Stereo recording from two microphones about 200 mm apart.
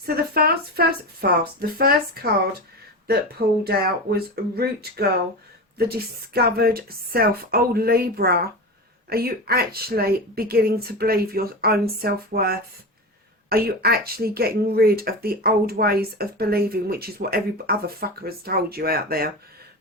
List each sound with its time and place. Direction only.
0.0 s speech: 50° right (ahead or behind)